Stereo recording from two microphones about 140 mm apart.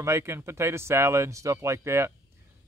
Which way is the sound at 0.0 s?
20° right (ahead or behind).